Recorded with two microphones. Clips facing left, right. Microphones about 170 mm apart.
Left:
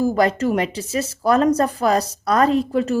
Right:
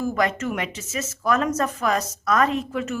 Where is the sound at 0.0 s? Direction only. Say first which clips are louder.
Left 6 dB; 35° left (ahead or behind).